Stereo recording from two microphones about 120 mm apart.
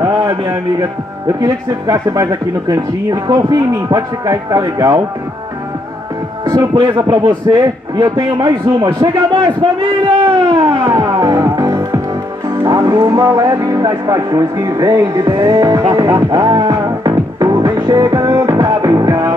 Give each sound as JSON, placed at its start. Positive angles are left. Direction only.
{"t": 0.0, "sound": "a man's voice", "side_deg": -30}
{"t": 6.5, "sound": "speech", "side_deg": -35}
{"t": 10.8, "sound": "music", "side_deg": -30}
{"t": 12.6, "sound": "speech", "side_deg": -30}